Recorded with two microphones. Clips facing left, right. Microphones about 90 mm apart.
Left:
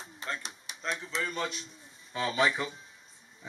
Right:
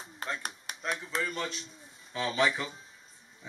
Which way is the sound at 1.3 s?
10° left (ahead or behind).